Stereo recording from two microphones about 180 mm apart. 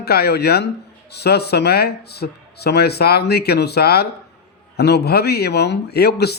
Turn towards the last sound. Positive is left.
turn(degrees=65)  # may be behind; listen again after turning